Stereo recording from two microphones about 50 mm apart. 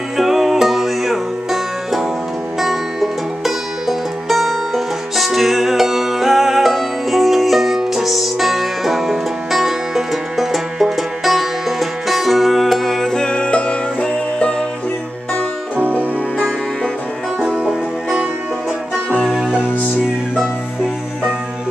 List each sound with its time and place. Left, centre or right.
0.2 s music: centre
13.1 s music: centre
15.8 s music: right
19.2 s music: centre